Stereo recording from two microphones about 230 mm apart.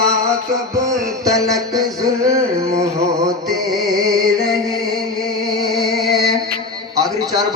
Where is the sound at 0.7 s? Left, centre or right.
Centre.